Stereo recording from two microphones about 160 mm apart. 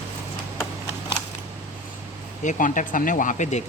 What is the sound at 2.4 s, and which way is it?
A man's voice, 55° left (ahead or behind).